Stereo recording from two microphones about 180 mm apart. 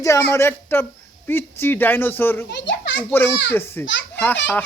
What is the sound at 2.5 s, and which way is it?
Children playing, 75° left (ahead or behind).